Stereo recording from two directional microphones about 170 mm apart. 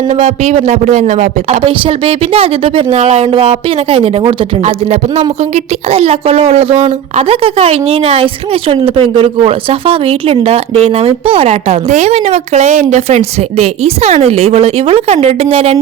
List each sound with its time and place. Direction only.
0.2 s a woman's voice: 40° right (ahead or behind)